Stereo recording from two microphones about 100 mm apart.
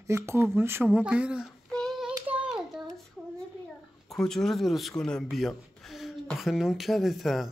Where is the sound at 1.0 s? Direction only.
10° right (ahead or behind).